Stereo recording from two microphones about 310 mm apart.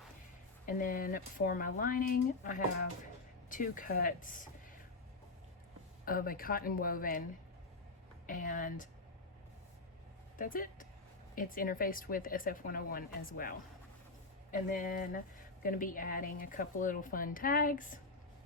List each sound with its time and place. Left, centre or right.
0.6 s a woman's voice: left
6.1 s a woman's voice: left
8.3 s a woman's voice: left
10.3 s a woman's voice: left
14.7 s a woman's voice: left